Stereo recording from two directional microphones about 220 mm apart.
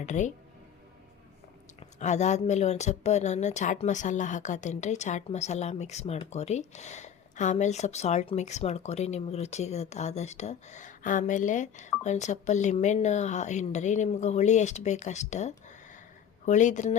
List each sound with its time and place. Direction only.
0.0 s a woman's voice: 35° left (ahead or behind)
1.8 s a woman's voice: 30° left (ahead or behind)